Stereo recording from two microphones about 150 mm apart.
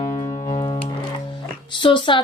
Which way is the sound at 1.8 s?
35° left (ahead or behind).